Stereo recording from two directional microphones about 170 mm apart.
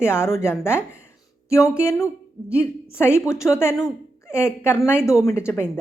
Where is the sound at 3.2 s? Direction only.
15° left (ahead or behind).